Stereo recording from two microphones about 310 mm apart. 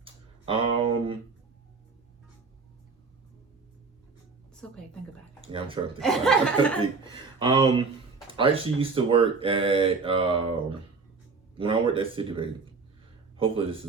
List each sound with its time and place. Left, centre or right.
0.0 s a sound: centre
5.4 s speech: centre
6.0 s speech: centre
7.0 s speech: centre